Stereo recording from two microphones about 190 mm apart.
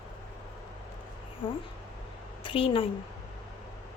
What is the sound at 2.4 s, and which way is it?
Speech, 30° left (ahead or behind).